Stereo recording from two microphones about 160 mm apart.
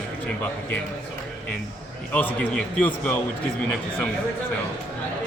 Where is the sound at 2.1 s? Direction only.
10° left (ahead or behind).